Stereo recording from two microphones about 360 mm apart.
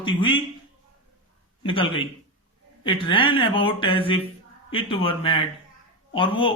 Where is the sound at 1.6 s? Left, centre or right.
Centre.